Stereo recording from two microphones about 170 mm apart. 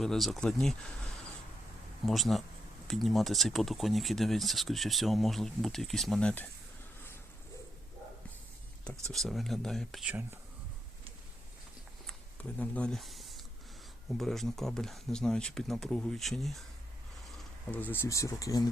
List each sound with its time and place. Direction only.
0.0 s speech: centre (ahead or behind)
9.1 s speech: centre (ahead or behind)
12.0 s a sound: 10° left (ahead or behind)
14.1 s speech: 5° left (ahead or behind); by 18.7 s 20° left (ahead or behind)